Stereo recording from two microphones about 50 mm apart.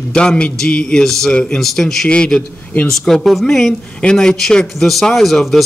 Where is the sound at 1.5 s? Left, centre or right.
Centre.